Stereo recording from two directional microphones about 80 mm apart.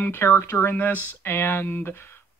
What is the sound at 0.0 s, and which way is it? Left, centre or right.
Speech, left.